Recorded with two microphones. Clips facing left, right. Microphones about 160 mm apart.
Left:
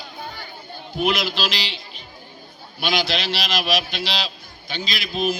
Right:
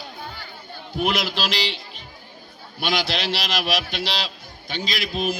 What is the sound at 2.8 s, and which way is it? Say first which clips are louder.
Speech: left 1 dB; 60° right (ahead or behind).